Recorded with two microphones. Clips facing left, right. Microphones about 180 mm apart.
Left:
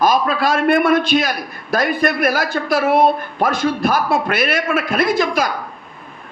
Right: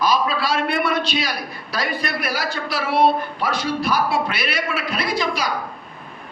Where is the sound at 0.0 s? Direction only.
50° left (ahead or behind).